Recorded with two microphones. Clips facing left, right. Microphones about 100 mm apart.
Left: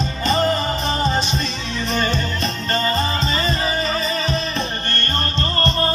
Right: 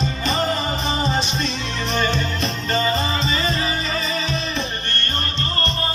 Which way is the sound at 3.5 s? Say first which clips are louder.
Left 2 dB; 45° left (ahead or behind).